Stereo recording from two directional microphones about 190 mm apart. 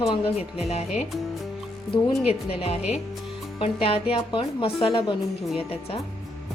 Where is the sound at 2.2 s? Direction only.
5° right (ahead or behind).